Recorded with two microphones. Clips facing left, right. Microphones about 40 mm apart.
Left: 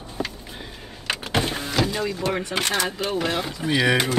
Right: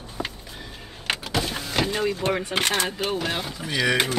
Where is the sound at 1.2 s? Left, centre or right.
Left.